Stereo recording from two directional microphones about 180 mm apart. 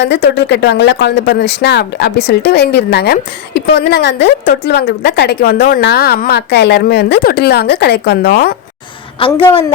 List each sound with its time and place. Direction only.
0.0 s a woman's voice: 70° left (ahead or behind)
9.1 s a woman's voice: 30° left (ahead or behind)